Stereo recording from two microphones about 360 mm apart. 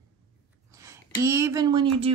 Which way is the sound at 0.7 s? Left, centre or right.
Centre.